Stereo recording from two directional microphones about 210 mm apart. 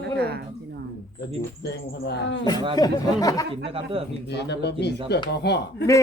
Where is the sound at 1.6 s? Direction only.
55° left (ahead or behind).